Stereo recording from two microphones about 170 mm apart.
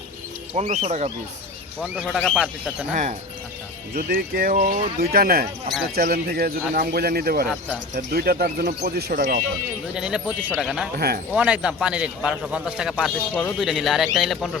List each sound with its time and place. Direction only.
0.5 s speech: 40° right (ahead or behind)
1.8 s a man's voice: 5° right (ahead or behind)
2.9 s speech: 45° right (ahead or behind)
3.9 s speech: 60° right (ahead or behind)
7.4 s a man's voice: centre (ahead or behind)
7.9 s speech: 60° right (ahead or behind)
9.9 s a man's voice: 5° right (ahead or behind)
10.9 s speech: 65° right (ahead or behind)
11.3 s a man's voice: 5° right (ahead or behind)